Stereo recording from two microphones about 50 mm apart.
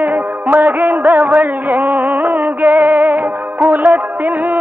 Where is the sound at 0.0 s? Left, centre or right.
Right.